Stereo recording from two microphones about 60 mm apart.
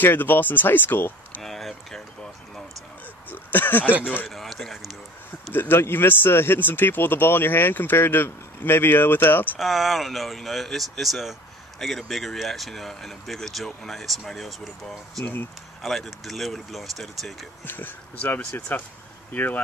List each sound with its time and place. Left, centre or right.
0.0 s speech: left
1.4 s speech: centre
3.3 s speech: left
4.3 s speech: centre
5.5 s speech: left
9.6 s speech: centre
17.6 s speech: left